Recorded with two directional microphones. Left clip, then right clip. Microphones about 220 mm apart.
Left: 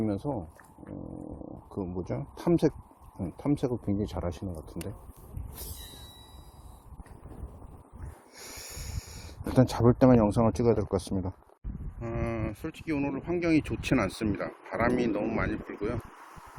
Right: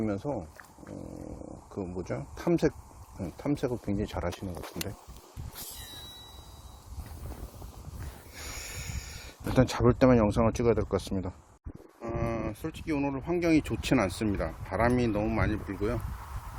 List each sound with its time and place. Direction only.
0.0 s speech: 15° left (ahead or behind)
1.8 s speech: 20° left (ahead or behind)
4.2 s speech: centre (ahead or behind)
8.5 s a sound: 10° left (ahead or behind)
9.6 s speech: 10° left (ahead or behind)
12.0 s speech: centre (ahead or behind)